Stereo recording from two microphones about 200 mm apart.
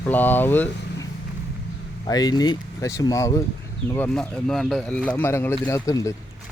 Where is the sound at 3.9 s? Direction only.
5° left (ahead or behind).